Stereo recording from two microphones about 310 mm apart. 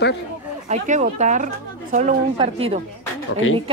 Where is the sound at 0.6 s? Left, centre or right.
Right.